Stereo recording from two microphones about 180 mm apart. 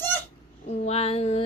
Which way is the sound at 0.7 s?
35° left (ahead or behind).